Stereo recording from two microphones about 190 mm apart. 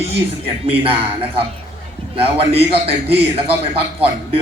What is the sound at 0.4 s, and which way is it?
Speech, 30° right (ahead or behind).